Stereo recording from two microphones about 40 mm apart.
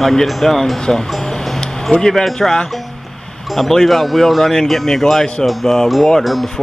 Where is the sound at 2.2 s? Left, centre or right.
Centre.